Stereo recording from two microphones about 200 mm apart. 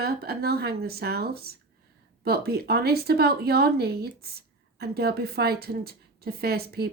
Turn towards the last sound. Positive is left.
turn(degrees=-50)  # may be behind; listen again after turning